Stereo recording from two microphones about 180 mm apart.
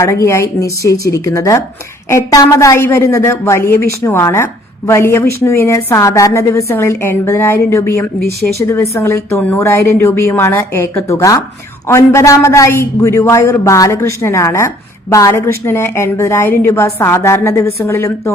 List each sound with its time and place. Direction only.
0.0 s a woman's voice: 15° left (ahead or behind)